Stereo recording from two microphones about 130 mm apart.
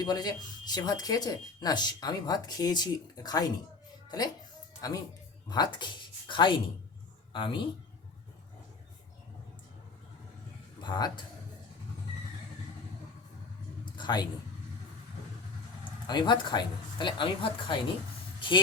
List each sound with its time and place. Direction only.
0.0 s speech: 30° left (ahead or behind)
4.8 s speech: 25° left (ahead or behind)
10.8 s speech: 35° left (ahead or behind)
13.9 s a sound: 35° left (ahead or behind)
15.8 s speech: 35° left (ahead or behind)
18.3 s vehicle: 40° left (ahead or behind)